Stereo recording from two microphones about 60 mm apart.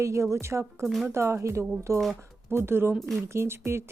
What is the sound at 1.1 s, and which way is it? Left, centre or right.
Speech, right.